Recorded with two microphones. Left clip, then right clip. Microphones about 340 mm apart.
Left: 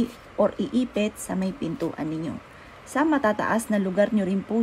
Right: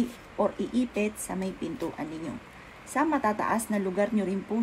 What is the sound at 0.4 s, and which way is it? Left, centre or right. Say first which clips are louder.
A woman's voice: left 4 dB; left.